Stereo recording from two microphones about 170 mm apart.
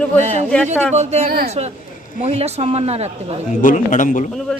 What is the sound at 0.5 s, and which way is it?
Speech, 10° left (ahead or behind).